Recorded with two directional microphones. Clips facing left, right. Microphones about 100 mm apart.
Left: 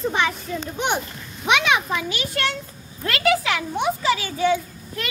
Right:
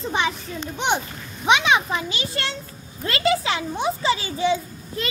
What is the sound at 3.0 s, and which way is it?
A child's voice, 25° right (ahead or behind).